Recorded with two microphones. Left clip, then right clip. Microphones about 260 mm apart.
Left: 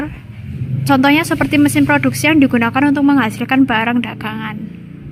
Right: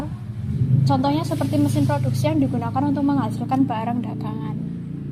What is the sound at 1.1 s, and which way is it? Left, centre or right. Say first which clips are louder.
Speech: left 10 dB; left.